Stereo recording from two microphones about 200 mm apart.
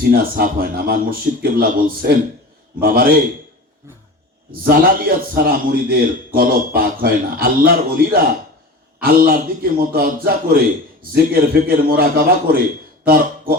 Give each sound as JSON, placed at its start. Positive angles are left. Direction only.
{"t": 0.0, "sound": "a man's voice", "side_deg": -45}
{"t": 4.5, "sound": "a man's voice", "side_deg": -45}